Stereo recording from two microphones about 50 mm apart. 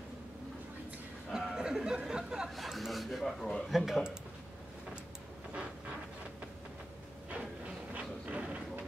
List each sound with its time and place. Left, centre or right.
1.3 s speech: centre
2.5 s speech: centre
7.9 s a sound: right